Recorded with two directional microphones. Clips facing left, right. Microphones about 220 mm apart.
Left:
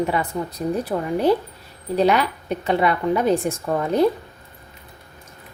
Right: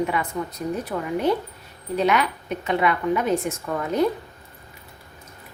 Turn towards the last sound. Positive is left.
turn(degrees=30)  # may be behind; listen again after turning